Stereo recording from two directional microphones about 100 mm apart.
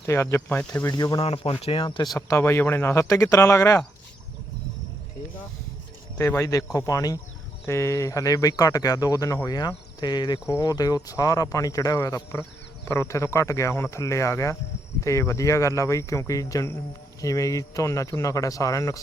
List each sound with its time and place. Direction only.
0.0 s speech: 30° left (ahead or behind)
0.4 s speech: 15° left (ahead or behind)
0.9 s speech: 40° left (ahead or behind)
1.2 s speech: 75° left (ahead or behind)
1.6 s speech: 65° left (ahead or behind)
2.1 s speech: 25° left (ahead or behind)
6.1 s speech: 30° left (ahead or behind)